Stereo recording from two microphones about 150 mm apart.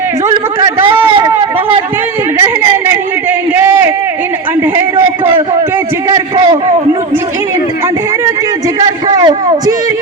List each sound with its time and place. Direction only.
1.0 s a man's voice: 35° right (ahead or behind)
2.4 s a man's voice: 15° right (ahead or behind)
6.3 s a man's voice: 35° right (ahead or behind)
9.0 s a man's voice: 25° right (ahead or behind)